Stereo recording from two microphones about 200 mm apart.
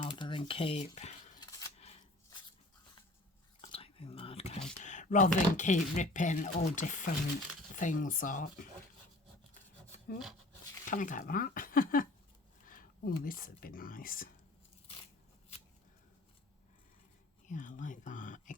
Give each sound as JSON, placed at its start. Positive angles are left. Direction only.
{"t": 0.0, "sound": "a sound", "side_deg": 25}
{"t": 1.4, "sound": "scissors", "side_deg": 15}
{"t": 1.8, "sound": "shuffling cards", "side_deg": 30}
{"t": 3.6, "sound": "a sound", "side_deg": 30}
{"t": 4.8, "sound": "speech", "side_deg": 40}
{"t": 10.8, "sound": "speech", "side_deg": 40}
{"t": 12.6, "sound": "a sound", "side_deg": 45}
{"t": 13.2, "sound": "speech", "side_deg": 45}
{"t": 17.4, "sound": "speech", "side_deg": 40}